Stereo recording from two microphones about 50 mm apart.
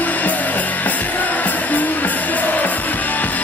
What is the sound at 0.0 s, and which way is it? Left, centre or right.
Music, left.